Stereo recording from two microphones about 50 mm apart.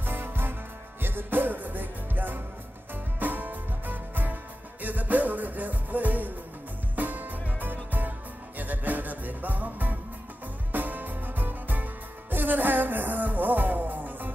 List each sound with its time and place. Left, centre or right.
0.0 s music: right